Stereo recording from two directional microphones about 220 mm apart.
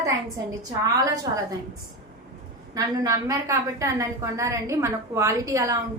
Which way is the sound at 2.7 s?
15° right (ahead or behind).